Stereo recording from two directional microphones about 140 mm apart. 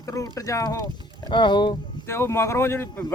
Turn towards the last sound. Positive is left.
turn(degrees=15)  # may be behind; listen again after turning